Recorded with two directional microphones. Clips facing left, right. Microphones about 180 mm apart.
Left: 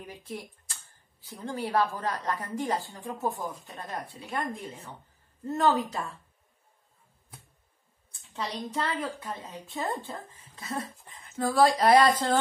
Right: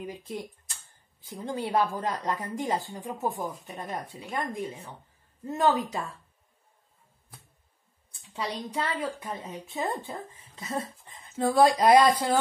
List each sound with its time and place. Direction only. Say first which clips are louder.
0.0 s a woman's voice: right 4 dB; 15° right (ahead or behind)
8.3 s a woman's voice: right 1 dB; 10° right (ahead or behind)